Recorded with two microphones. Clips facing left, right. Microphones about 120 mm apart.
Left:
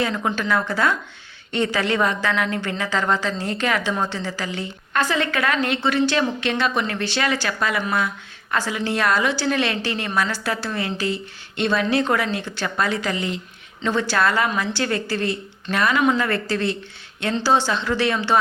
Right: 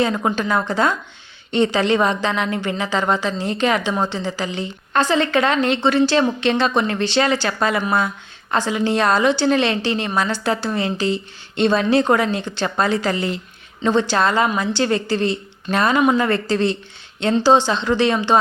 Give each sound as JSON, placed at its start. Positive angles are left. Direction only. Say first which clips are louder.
{"t": 0.2, "sound": "a woman's voice", "louder": "right 2 dB", "side_deg": -25}
{"t": 13.8, "sound": "a woman's voice", "louder": "right 3 dB", "side_deg": -25}